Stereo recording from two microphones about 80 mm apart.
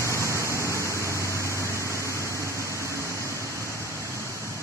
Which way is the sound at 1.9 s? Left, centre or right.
Left.